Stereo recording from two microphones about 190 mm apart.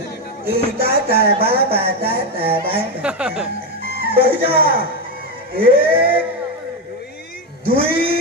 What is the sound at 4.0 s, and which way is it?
Speech, 55° right (ahead or behind).